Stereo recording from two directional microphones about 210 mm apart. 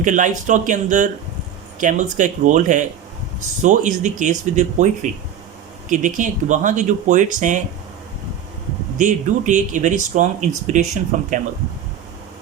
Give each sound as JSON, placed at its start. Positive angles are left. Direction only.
{"t": 0.0, "sound": "speech", "side_deg": -35}
{"t": 5.9, "sound": "speech", "side_deg": -35}
{"t": 9.0, "sound": "speech", "side_deg": -35}